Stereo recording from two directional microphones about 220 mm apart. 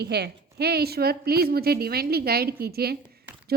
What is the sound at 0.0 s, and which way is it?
A woman's voice, 45° right (ahead or behind).